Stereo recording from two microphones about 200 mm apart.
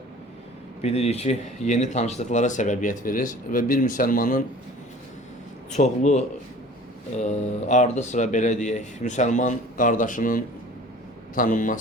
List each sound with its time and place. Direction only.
0.8 s speech: 30° left (ahead or behind)
5.7 s a man's voice: 35° left (ahead or behind)